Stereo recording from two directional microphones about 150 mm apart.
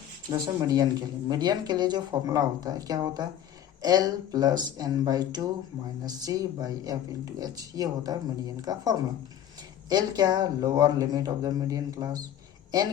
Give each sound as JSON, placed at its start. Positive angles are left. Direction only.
{"t": 0.3, "sound": "speech", "side_deg": -25}